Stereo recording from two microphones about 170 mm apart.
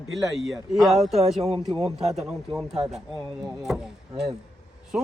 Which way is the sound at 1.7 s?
35° right (ahead or behind).